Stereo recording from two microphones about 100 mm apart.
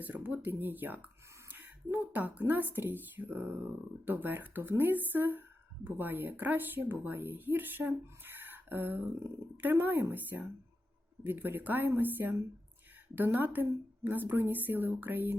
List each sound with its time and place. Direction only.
0.0 s speech: 20° right (ahead or behind)